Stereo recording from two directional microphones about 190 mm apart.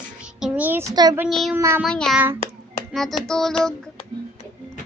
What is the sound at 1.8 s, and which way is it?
Child singing, 5° left (ahead or behind).